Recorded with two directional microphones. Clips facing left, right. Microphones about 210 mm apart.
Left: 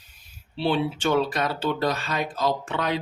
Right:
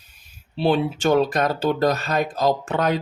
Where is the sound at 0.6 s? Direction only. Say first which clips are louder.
Right 4 dB; 45° right (ahead or behind).